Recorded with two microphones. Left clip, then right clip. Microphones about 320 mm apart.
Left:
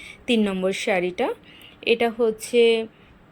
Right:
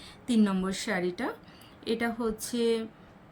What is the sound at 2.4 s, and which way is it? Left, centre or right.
Speech, centre.